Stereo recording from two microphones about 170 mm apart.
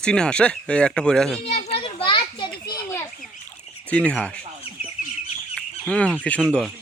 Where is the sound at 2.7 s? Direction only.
10° left (ahead or behind).